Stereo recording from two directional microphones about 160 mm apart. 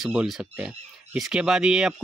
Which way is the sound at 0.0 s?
5° right (ahead or behind).